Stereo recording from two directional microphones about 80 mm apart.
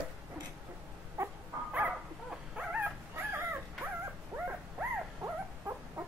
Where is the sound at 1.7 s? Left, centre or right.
Centre.